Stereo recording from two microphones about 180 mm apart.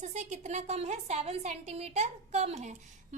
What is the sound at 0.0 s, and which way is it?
A woman's voice, 40° right (ahead or behind).